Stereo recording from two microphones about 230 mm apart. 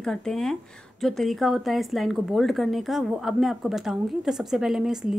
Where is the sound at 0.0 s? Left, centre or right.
Centre.